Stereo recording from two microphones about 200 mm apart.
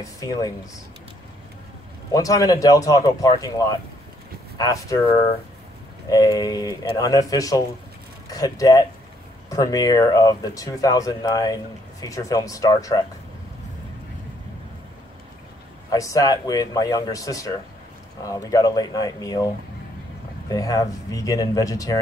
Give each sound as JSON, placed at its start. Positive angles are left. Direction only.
{"t": 0.0, "sound": "speech", "side_deg": 15}
{"t": 2.1, "sound": "speech", "side_deg": 15}
{"t": 15.9, "sound": "speech", "side_deg": 15}
{"t": 20.4, "sound": "speech", "side_deg": 15}